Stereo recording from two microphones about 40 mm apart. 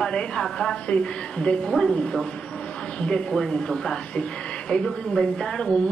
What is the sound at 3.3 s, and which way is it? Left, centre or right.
Speech, centre.